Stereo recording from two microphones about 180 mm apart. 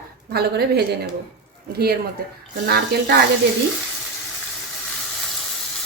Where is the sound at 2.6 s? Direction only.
60° right (ahead or behind).